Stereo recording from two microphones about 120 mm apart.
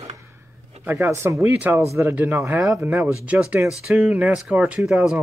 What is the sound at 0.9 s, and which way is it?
Speech, 25° right (ahead or behind).